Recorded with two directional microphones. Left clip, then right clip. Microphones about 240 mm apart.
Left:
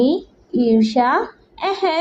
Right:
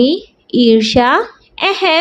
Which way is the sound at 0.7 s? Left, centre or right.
Right.